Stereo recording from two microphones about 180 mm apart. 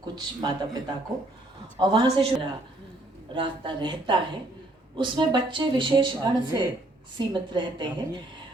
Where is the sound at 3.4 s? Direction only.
25° right (ahead or behind).